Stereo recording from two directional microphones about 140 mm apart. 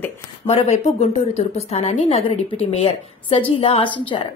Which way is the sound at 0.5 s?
50° left (ahead or behind).